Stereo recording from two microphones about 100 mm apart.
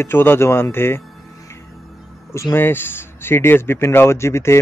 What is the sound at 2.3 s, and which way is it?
A man's voice, 25° left (ahead or behind).